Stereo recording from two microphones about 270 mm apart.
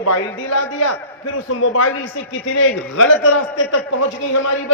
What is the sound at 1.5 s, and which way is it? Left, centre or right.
Speech, left.